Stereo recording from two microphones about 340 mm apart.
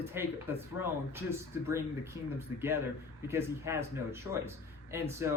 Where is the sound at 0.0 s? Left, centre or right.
Centre.